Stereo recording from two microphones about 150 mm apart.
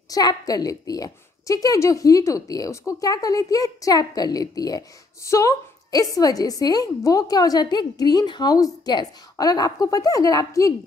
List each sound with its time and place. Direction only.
0.1 s a woman's voice: 25° left (ahead or behind)